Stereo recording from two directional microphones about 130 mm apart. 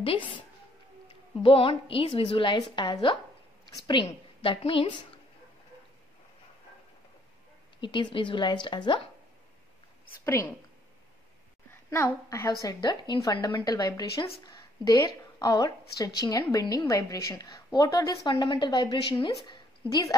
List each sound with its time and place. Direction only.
0.0 s a woman's voice: 45° left (ahead or behind)
1.4 s a woman's voice: 45° left (ahead or behind)
7.8 s a woman's voice: 35° left (ahead or behind)
10.2 s a woman's voice: 20° left (ahead or behind)
11.9 s a woman's voice: 20° left (ahead or behind)